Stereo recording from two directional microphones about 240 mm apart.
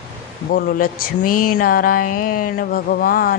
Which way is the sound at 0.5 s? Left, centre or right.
Left.